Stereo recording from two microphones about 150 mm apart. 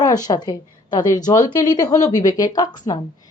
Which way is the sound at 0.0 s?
25° left (ahead or behind).